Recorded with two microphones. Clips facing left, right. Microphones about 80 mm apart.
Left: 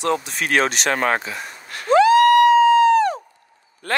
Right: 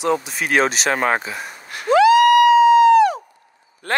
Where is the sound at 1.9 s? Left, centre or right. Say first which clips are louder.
Right 1 dB; left.